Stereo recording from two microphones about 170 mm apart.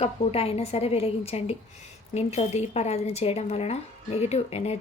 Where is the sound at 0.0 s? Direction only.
35° left (ahead or behind).